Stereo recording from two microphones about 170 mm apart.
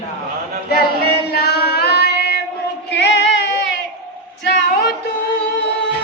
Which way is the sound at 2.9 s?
90° left.